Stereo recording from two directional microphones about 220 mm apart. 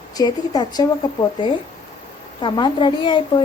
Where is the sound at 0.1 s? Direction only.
15° left (ahead or behind).